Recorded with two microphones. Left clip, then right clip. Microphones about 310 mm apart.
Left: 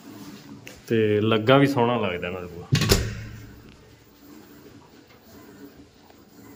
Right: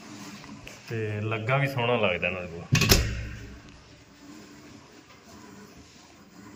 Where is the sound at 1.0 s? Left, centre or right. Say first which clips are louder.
Left 11 dB; left.